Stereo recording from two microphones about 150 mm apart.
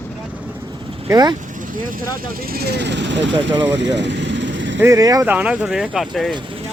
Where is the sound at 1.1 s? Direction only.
25° right (ahead or behind).